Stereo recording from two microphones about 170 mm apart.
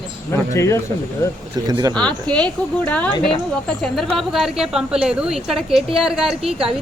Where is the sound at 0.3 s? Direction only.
15° left (ahead or behind).